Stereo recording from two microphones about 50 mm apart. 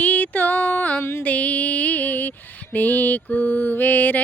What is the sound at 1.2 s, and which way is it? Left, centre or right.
Female singing, left.